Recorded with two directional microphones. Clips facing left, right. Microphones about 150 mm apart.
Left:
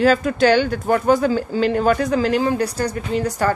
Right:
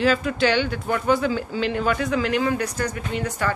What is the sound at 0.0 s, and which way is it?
A woman's voice, 45° left (ahead or behind).